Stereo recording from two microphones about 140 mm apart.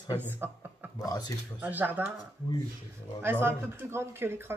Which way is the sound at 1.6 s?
15° right (ahead or behind).